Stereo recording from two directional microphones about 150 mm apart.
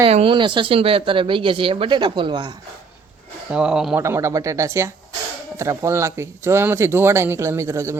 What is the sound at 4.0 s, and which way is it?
Speech, 20° right (ahead or behind).